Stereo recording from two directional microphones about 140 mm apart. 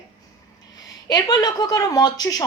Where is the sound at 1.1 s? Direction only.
30° left (ahead or behind).